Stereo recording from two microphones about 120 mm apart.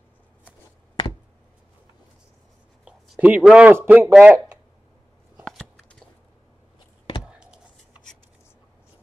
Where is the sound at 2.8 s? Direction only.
10° right (ahead or behind).